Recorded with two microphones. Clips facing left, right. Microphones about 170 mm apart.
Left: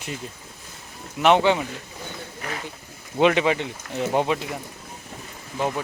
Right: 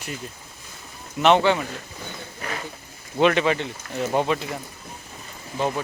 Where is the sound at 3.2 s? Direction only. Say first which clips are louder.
Even; 15° left (ahead or behind).